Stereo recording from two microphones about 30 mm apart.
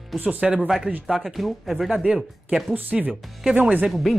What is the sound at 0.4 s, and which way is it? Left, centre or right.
Speech, centre.